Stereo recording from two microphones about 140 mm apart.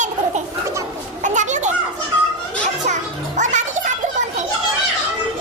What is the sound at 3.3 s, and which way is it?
Music, 60° right (ahead or behind).